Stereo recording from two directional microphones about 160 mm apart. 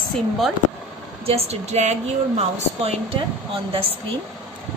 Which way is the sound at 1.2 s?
40° right (ahead or behind).